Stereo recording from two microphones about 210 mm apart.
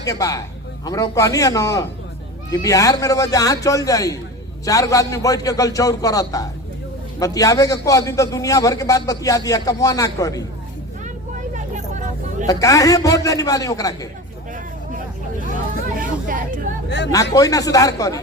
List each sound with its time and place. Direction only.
0.0 s a man's voice: 15° left (ahead or behind)
12.5 s a man's voice: 15° left (ahead or behind)
16.0 s vehicle: 40° right (ahead or behind)
17.1 s a man's voice: 15° left (ahead or behind)